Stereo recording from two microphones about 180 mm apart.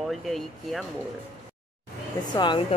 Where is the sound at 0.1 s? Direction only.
Centre (ahead or behind).